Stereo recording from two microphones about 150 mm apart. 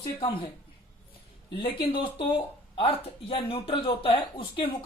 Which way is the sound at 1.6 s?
35° left (ahead or behind).